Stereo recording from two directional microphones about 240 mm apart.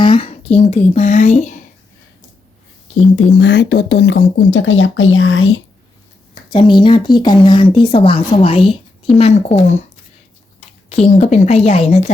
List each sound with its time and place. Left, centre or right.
0.0 s speech: left
3.2 s speech: left
6.5 s speech: centre
10.8 s speech: left